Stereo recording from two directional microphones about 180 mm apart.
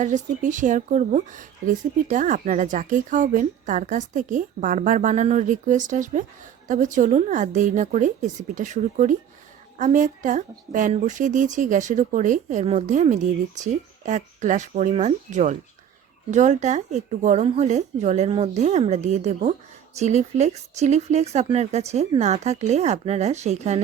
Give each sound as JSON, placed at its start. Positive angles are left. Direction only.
{"t": 0.0, "sound": "speech", "side_deg": -45}